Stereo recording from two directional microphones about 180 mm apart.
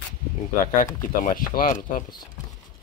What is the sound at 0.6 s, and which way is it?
Speech, 50° left (ahead or behind).